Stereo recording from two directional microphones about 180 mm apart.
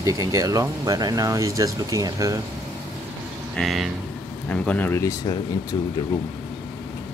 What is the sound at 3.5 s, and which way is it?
Speech, centre (ahead or behind).